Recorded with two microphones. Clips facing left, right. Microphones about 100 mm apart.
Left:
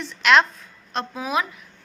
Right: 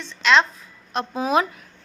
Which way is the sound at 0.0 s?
10° left (ahead or behind).